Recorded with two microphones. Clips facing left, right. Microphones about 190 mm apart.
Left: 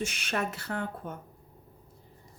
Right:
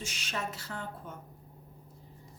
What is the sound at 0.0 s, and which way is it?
A woman's voice, 60° left (ahead or behind).